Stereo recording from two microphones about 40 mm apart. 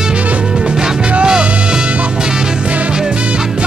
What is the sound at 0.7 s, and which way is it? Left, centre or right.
Music, centre.